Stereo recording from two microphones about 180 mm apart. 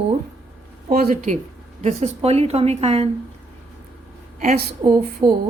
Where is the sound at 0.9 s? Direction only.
50° right (ahead or behind).